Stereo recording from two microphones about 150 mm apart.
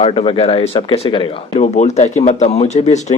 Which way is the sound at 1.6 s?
50° left (ahead or behind).